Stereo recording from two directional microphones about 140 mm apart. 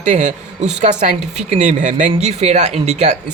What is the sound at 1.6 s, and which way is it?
Speech, 65° right (ahead or behind).